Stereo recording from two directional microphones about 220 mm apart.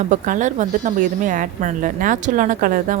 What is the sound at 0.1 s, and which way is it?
A woman's voice, 35° right (ahead or behind).